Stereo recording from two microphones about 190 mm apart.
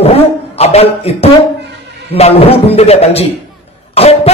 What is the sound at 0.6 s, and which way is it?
A man's voice, 35° left (ahead or behind).